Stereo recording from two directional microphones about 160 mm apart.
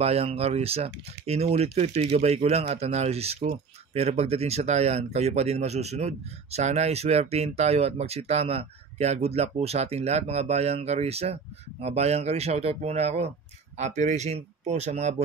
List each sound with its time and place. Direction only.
0.0 s speech: 40° right (ahead or behind)